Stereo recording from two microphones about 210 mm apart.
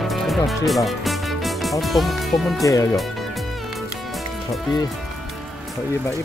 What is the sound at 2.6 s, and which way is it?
Speech, 15° left (ahead or behind).